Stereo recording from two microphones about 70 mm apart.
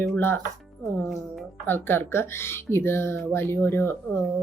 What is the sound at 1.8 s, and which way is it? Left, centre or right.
Speech, left.